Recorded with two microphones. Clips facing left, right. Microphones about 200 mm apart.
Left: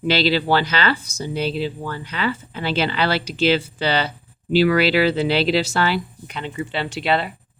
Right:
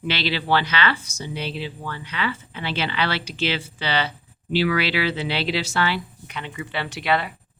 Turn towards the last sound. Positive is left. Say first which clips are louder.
# left 2 dB
turn(degrees=30)  # may be behind; listen again after turning